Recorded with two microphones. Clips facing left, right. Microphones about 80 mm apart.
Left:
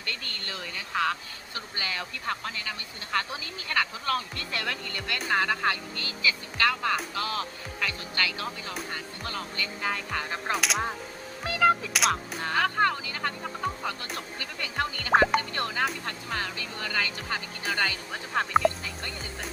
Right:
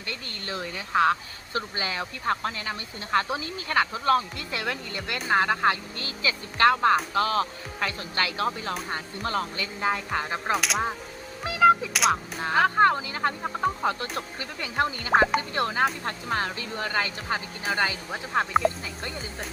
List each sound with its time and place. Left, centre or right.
0.0 s speech: centre
4.4 s speech: centre; by 9.5 s right
9.6 s speech: right
10.5 s music: centre
11.4 s a sound: centre
11.9 s music: centre
12.4 s speech: right
14.3 s speech: right